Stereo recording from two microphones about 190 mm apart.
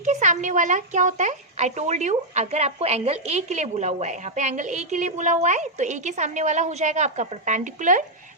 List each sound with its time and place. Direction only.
0.0 s speech: 40° right (ahead or behind)